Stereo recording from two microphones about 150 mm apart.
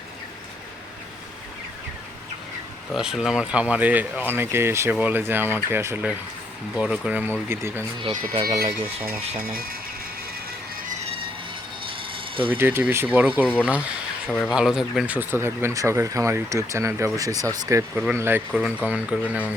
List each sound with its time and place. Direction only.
2.9 s speech: 5° right (ahead or behind)
8.0 s speech: 35° right (ahead or behind)
9.4 s speech: 75° right (ahead or behind)
11.9 s a sound: 35° right (ahead or behind)
12.5 s speech: 15° right (ahead or behind)
14.3 s speech: 10° left (ahead or behind)
14.5 s speech: centre (ahead or behind)